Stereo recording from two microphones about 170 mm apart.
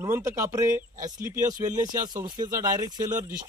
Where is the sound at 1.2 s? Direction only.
50° right (ahead or behind).